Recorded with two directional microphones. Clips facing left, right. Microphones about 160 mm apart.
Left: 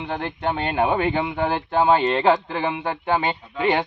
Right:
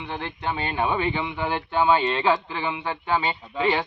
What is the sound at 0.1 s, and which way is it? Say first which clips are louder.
A man's voice: left 4 dB; 50° left (ahead or behind).